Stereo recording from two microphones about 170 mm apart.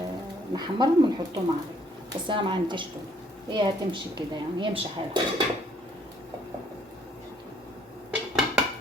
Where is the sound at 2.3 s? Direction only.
30° right (ahead or behind).